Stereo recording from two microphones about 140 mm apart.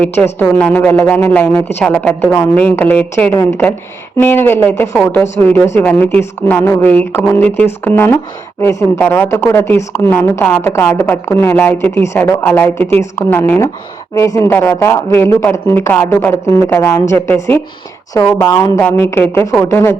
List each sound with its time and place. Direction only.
0.3 s a woman's voice: 10° left (ahead or behind)